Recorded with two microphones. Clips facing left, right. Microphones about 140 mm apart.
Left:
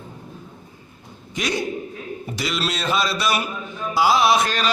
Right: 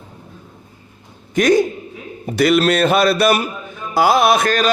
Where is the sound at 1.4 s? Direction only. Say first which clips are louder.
Right 12 dB; 50° right (ahead or behind).